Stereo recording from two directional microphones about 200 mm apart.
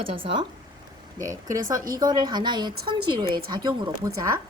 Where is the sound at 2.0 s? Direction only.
20° right (ahead or behind).